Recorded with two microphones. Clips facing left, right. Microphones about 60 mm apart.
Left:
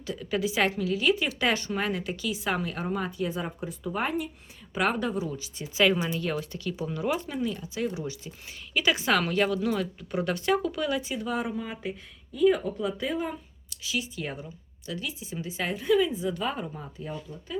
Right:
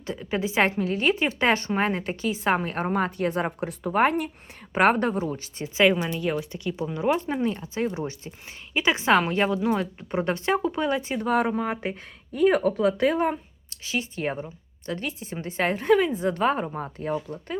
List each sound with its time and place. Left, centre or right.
0.0 s a woman's voice: right
5.7 s speech: right
7.1 s a woman's voice: right
13.7 s speech: right